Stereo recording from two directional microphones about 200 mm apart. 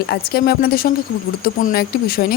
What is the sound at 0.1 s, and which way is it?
Speech, 50° left (ahead or behind).